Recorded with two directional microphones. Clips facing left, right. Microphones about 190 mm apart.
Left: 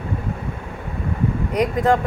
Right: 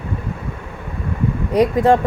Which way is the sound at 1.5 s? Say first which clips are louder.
Right 5 dB; 30° right (ahead or behind).